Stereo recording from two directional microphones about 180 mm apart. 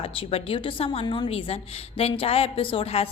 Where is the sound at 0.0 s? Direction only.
30° left (ahead or behind).